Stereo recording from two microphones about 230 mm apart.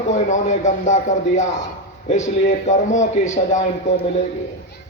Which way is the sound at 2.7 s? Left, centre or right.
Left.